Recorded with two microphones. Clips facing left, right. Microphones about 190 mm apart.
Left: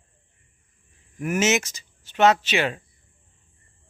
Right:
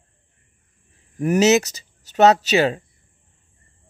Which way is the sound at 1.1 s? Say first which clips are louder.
Right 7 dB; 35° right (ahead or behind).